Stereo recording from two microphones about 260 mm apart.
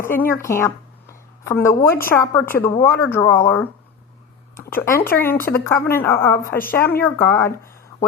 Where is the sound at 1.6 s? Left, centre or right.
Centre.